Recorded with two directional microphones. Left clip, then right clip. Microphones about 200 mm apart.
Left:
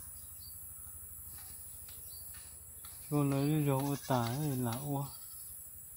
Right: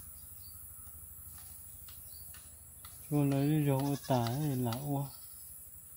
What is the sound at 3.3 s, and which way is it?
Speech, 15° right (ahead or behind).